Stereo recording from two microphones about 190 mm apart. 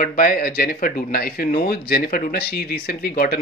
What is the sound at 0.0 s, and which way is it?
Speech, 50° left (ahead or behind).